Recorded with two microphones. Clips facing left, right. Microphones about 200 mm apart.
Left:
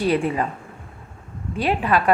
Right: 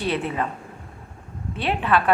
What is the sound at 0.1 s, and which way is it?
Speech, 10° left (ahead or behind).